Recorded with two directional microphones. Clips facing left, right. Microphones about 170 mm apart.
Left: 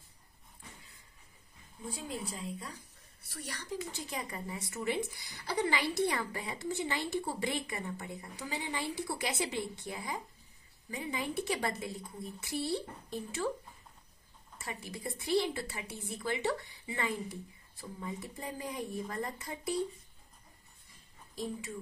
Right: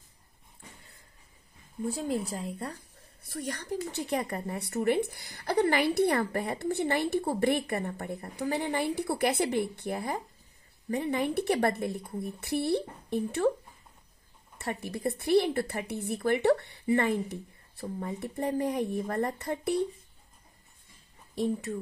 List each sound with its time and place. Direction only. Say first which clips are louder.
2.3 s a woman's voice: right 6 dB; 65° right (ahead or behind)
3.3 s a woman's voice: right 7 dB; 50° right (ahead or behind)
14.6 s a woman's voice: right 9 dB; 65° right (ahead or behind)
17.8 s speech: right 7 dB; 45° right (ahead or behind)
18.2 s a woman's voice: right 11 dB; 60° right (ahead or behind)
21.4 s a woman's voice: right 9 dB; 65° right (ahead or behind)